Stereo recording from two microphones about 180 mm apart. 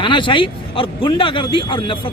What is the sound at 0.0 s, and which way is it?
Speech, 25° left (ahead or behind).